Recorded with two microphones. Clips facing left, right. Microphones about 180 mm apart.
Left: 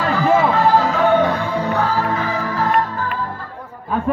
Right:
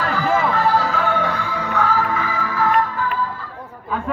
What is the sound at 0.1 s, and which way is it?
Music, 20° left (ahead or behind).